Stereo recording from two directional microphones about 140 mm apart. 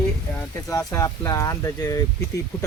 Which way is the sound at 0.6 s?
20° left (ahead or behind).